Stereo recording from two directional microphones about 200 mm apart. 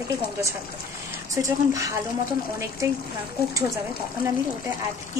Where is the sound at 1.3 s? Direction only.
15° right (ahead or behind).